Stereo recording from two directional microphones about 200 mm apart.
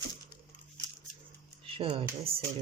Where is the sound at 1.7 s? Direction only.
25° right (ahead or behind).